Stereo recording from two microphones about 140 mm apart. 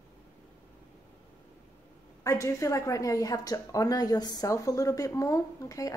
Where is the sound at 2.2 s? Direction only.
20° left (ahead or behind).